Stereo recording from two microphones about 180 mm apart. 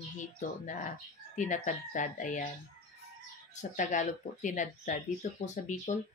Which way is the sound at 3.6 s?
45° left (ahead or behind).